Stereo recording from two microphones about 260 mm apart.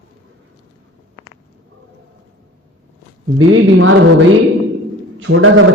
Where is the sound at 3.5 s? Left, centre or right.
Right.